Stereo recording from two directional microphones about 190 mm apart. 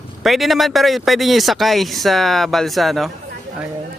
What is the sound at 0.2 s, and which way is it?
A man's voice, centre (ahead or behind).